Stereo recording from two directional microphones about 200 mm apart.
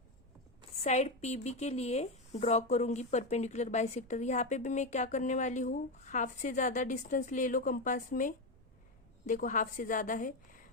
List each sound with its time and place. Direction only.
0.9 s speech: 35° left (ahead or behind)